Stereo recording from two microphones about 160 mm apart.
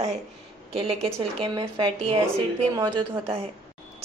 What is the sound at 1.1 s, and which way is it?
A woman's voice, 35° right (ahead or behind).